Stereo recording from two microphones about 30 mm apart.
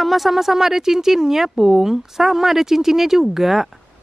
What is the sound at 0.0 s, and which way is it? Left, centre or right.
Speech, centre.